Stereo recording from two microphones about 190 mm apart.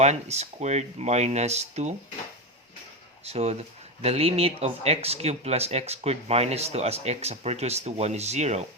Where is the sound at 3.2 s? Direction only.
35° right (ahead or behind).